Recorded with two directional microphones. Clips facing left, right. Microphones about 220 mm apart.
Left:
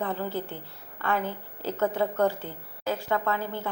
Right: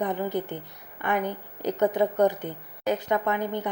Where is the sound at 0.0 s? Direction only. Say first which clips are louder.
Right 3 dB; 15° right (ahead or behind).